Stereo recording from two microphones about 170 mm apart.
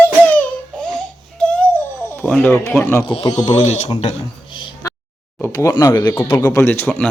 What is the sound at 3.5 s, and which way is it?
Speech, 40° left (ahead or behind).